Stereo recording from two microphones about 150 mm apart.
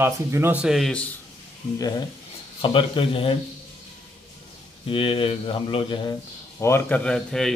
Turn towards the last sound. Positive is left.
turn(degrees=5)  # may be behind; listen again after turning